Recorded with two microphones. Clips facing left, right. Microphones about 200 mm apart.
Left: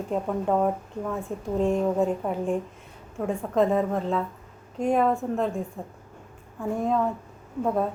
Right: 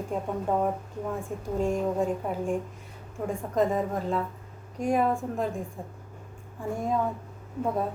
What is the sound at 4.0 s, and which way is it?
A woman's voice, 5° right (ahead or behind).